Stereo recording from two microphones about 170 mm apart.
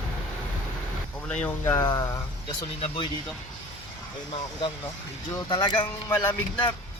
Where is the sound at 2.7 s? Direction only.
30° left (ahead or behind).